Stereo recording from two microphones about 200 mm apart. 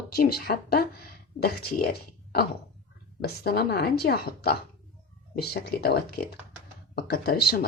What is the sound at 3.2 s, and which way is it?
Speech, 50° left (ahead or behind).